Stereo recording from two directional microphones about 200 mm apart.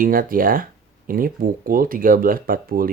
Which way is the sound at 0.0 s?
45° right (ahead or behind).